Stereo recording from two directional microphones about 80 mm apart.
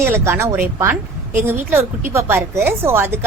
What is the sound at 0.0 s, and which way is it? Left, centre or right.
A woman's voice, right.